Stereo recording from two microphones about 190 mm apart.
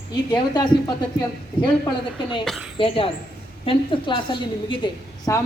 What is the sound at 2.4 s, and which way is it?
Speech, centre (ahead or behind).